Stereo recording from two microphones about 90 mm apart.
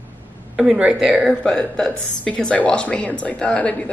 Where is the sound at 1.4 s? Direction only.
10° left (ahead or behind).